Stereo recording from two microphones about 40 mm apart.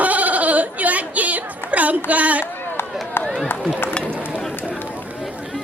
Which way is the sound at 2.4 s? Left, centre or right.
Left.